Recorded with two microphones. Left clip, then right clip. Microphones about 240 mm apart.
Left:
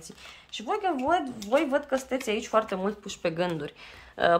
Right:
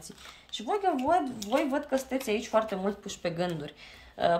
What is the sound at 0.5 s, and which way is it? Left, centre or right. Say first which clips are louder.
Speech: even; centre.